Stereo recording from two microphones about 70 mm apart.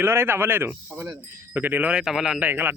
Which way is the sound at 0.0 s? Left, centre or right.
Right.